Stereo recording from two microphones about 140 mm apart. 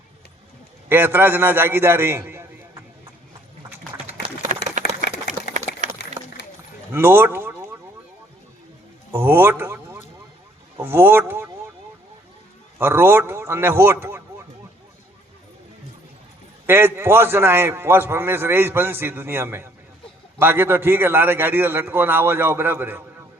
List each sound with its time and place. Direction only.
0.9 s a man's voice: 15° right (ahead or behind)
4.4 s a sound: 65° right (ahead or behind)
6.9 s speech: 15° right (ahead or behind)
9.1 s a man's voice: 15° right (ahead or behind)
12.8 s a man's voice: 15° right (ahead or behind)
16.6 s a man's voice: 15° right (ahead or behind)